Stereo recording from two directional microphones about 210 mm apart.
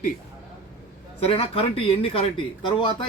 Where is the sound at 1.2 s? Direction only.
25° left (ahead or behind).